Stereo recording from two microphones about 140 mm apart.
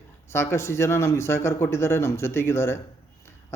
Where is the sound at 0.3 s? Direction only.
20° left (ahead or behind).